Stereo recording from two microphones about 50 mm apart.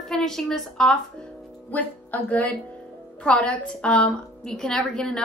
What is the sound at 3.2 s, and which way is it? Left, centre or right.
A woman's voice, left.